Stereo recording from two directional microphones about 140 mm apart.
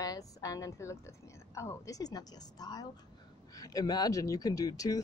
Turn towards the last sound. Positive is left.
turn(degrees=25)  # may be behind; listen again after turning